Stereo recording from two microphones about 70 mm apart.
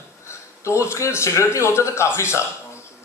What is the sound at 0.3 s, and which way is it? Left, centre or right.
Speech, left.